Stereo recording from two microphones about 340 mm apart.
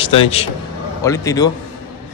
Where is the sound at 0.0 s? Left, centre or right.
Centre.